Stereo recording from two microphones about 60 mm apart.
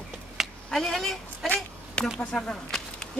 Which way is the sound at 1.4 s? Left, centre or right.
Left.